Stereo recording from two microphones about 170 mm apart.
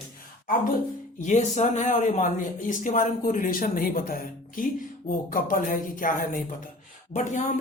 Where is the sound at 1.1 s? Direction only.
45° left (ahead or behind).